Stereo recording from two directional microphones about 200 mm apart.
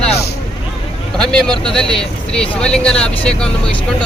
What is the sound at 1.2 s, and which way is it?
Speech, 5° left (ahead or behind).